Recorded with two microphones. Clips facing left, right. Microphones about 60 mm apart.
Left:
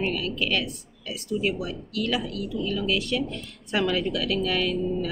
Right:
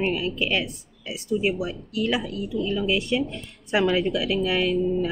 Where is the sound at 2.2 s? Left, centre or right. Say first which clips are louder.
Right 2 dB; centre.